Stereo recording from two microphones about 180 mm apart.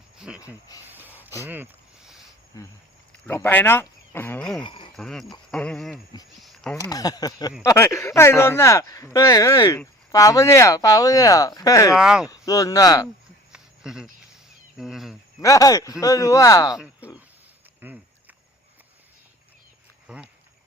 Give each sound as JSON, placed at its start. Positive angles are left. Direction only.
{"t": 0.2, "sound": "cricket", "side_deg": -5}
{"t": 0.9, "sound": "a sound", "side_deg": -10}
{"t": 2.5, "sound": "speech", "side_deg": 20}
{"t": 4.6, "sound": "speech", "side_deg": 25}
{"t": 4.9, "sound": "speech", "side_deg": 0}
{"t": 6.4, "sound": "a sound", "side_deg": 0}
{"t": 6.7, "sound": "speech", "side_deg": 20}
{"t": 11.9, "sound": "speech", "side_deg": -5}
{"t": 12.3, "sound": "speech", "side_deg": 20}
{"t": 13.5, "sound": "a sound", "side_deg": -5}
{"t": 14.8, "sound": "speech", "side_deg": 0}
{"t": 15.4, "sound": "speech", "side_deg": 20}
{"t": 16.7, "sound": "speech", "side_deg": -5}
{"t": 20.1, "sound": "a sound", "side_deg": -5}